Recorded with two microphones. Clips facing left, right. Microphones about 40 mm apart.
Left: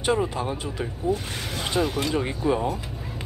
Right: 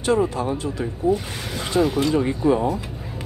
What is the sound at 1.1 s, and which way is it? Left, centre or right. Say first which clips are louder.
Speech: right 4 dB; centre.